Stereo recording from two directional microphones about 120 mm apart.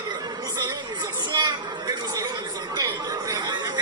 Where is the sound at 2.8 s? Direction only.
30° right (ahead or behind).